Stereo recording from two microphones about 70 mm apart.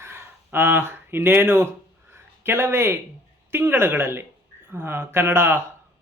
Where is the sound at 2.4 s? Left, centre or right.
Right.